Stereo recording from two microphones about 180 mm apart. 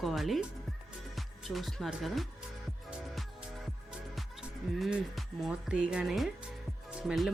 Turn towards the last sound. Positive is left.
turn(degrees=0)  # may be behind; listen again after turning